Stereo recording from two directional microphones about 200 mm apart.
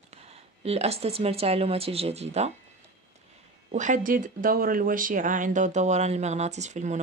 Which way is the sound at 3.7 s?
40° right (ahead or behind).